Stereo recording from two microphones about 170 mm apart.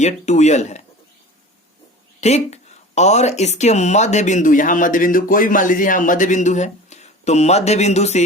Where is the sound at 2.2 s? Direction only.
40° left (ahead or behind).